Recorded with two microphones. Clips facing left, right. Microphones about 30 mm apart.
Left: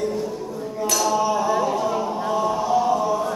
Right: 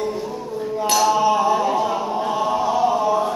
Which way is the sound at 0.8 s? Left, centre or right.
Right.